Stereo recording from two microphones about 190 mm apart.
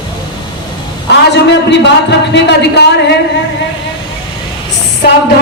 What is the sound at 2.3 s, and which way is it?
Speech, 65° left (ahead or behind).